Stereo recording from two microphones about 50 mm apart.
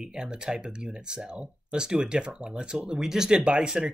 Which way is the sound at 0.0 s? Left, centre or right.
Centre.